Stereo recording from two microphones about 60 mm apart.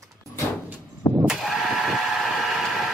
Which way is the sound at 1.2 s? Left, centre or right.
Centre.